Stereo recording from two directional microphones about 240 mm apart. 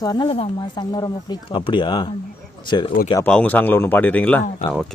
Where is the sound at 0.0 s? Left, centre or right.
Centre.